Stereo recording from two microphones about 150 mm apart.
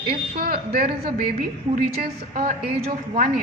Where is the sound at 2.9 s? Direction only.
70° right (ahead or behind).